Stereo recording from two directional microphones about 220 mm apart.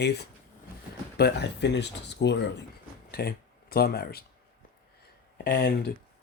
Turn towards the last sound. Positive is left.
turn(degrees=40)  # may be behind; listen again after turning